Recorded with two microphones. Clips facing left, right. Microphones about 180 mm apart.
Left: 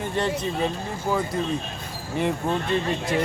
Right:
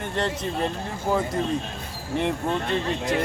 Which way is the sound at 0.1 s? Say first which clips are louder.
Left 1 dB; 5° left (ahead or behind).